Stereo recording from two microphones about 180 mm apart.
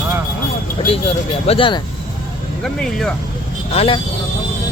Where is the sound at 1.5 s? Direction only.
30° left (ahead or behind).